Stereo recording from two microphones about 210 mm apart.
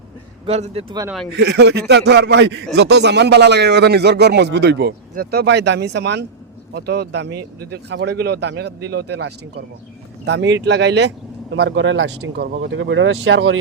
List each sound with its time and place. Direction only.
0.4 s a man's voice: 30° right (ahead or behind)
1.4 s speech: 50° right (ahead or behind); by 13.6 s 70° right (ahead or behind)